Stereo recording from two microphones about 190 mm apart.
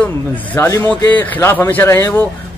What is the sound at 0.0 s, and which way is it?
A man's voice, 10° left (ahead or behind).